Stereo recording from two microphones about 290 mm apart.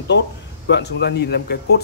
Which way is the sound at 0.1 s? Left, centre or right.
Left.